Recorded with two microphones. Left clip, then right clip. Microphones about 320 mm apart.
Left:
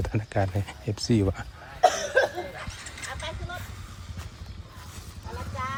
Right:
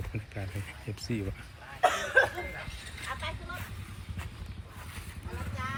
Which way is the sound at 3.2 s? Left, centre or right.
Left.